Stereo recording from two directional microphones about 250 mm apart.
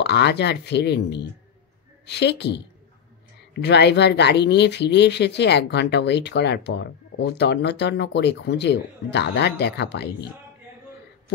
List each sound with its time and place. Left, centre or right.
0.0 s speech: left